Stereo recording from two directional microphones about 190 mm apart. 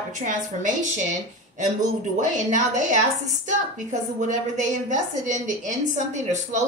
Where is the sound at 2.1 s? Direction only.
40° right (ahead or behind).